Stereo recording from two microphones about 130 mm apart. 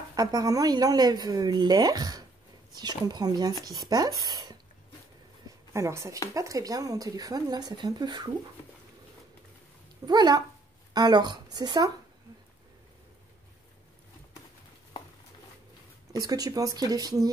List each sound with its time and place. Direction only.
0.1 s a woman's voice: 30° right (ahead or behind)
5.7 s a woman's voice: 20° right (ahead or behind)
10.0 s speech: 30° right (ahead or behind)
16.1 s a woman's voice: 30° right (ahead or behind)